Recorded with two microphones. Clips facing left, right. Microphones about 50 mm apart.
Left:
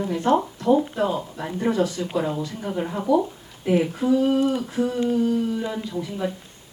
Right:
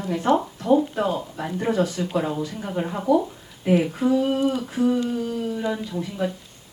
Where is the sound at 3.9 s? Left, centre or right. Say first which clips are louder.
Left 1 dB; centre.